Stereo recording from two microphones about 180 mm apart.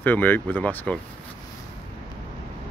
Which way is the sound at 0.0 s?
10° left (ahead or behind).